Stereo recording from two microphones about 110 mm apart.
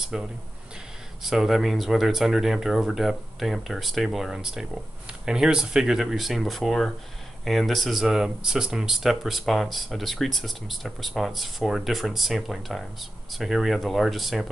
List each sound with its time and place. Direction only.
0.1 s speech: 5° right (ahead or behind)